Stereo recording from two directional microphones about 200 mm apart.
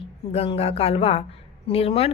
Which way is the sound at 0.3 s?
30° left (ahead or behind).